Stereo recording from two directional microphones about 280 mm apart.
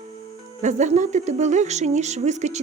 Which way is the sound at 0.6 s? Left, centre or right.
Right.